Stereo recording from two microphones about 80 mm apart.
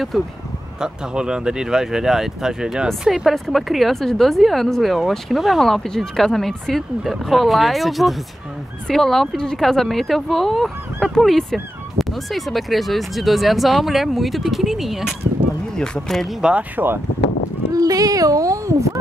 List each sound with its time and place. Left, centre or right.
0.1 s speech: centre
0.7 s speech: centre
15.7 s speech: centre
16.3 s speech: centre
16.7 s speech: right
17.7 s speech: right